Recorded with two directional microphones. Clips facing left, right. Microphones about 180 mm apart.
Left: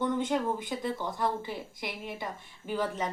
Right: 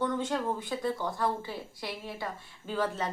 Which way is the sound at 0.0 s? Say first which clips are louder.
Left 2 dB; 20° left (ahead or behind).